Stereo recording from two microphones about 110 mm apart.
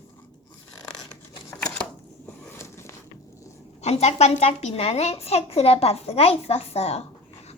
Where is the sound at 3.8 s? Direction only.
80° left.